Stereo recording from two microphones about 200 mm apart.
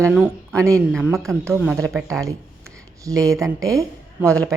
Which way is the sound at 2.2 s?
15° right (ahead or behind).